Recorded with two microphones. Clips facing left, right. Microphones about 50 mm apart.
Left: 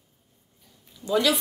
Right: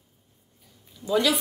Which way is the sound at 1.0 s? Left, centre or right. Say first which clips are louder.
Even; centre.